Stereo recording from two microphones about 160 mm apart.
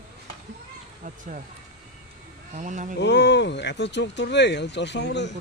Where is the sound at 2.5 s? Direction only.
50° right (ahead or behind).